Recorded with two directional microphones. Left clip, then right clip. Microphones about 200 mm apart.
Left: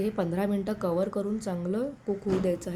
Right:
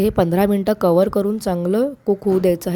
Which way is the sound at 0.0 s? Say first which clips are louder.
Right 12 dB; 50° right (ahead or behind).